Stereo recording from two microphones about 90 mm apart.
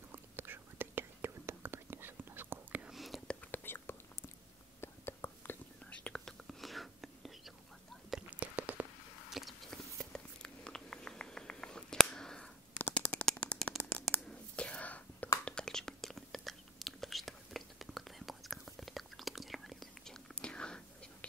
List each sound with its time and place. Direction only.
0.1 s whispering: 25° right (ahead or behind)
2.9 s whispering: centre (ahead or behind)
3.3 s whispering: 20° left (ahead or behind)
5.9 s whispering: 15° left (ahead or behind)
8.3 s a sound: 15° right (ahead or behind)
9.3 s a sound: centre (ahead or behind)
12.7 s shuffling cards: 15° left (ahead or behind)
13.7 s a sound: 15° left (ahead or behind)
14.5 s whispering: 15° left (ahead or behind)